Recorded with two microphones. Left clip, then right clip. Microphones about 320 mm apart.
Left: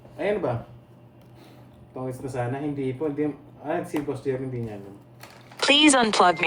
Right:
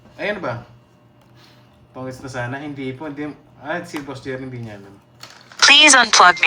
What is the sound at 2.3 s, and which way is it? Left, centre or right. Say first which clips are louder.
A man's voice: right 2 dB; right.